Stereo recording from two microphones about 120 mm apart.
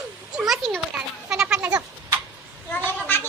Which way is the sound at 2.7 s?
15° left (ahead or behind).